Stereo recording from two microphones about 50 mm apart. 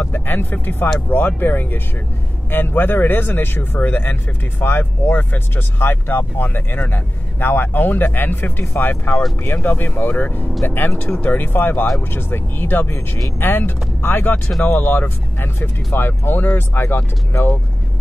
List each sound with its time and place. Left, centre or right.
0.1 s speech: left